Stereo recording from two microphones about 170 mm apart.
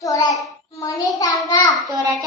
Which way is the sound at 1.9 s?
20° right (ahead or behind).